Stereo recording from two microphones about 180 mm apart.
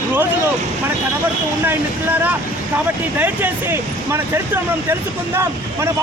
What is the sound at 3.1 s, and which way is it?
Speech, 10° right (ahead or behind).